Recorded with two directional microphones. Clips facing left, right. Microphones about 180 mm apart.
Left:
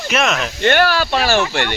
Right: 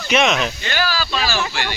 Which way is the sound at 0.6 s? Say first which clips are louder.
Left 8 dB; 60° left (ahead or behind).